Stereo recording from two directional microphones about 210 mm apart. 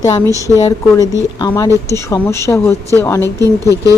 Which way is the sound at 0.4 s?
15° left (ahead or behind).